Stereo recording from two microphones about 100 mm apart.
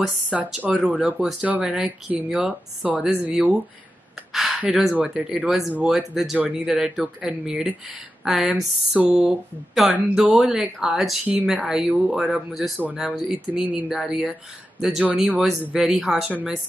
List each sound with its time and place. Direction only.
0.0 s speech: 5° right (ahead or behind)
4.3 s gasp: centre (ahead or behind)
4.9 s speech: 10° right (ahead or behind)
16.3 s speech: 15° right (ahead or behind)